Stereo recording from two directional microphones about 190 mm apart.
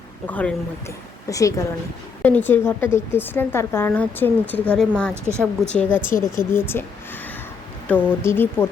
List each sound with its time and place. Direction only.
0.3 s a woman's voice: 10° left (ahead or behind)
6.1 s speech: 45° left (ahead or behind)
6.5 s a woman's voice: 10° left (ahead or behind)
7.9 s a woman's voice: 10° left (ahead or behind)